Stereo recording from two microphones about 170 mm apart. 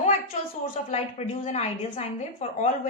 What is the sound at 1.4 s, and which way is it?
A woman's voice, 40° left (ahead or behind).